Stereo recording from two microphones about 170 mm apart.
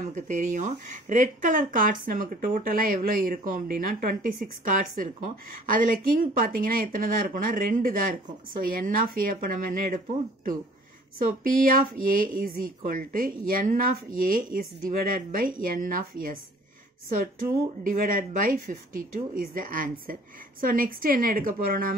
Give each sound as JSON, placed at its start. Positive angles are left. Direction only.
{"t": 0.1, "sound": "speech", "side_deg": -45}
{"t": 17.8, "sound": "speech", "side_deg": -55}